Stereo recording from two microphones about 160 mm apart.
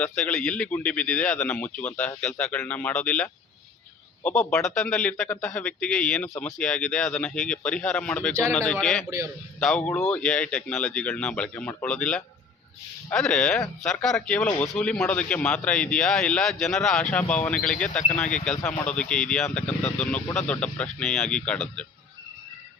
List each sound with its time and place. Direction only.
0.0 s a man's voice: 5° left (ahead or behind)
9.0 s a man's voice: 20° right (ahead or behind)
9.6 s a man's voice: 5° left (ahead or behind)